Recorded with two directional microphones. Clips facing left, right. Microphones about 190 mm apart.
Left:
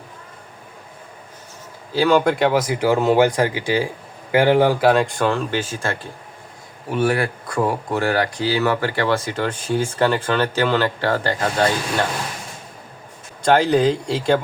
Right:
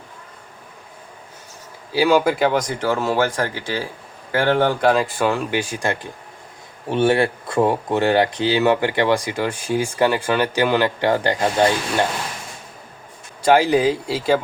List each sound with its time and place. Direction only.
1.9 s speech: 10° right (ahead or behind)
13.4 s speech: 10° right (ahead or behind)